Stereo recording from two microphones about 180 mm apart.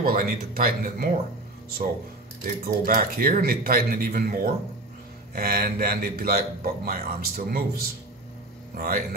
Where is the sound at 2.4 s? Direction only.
50° right (ahead or behind).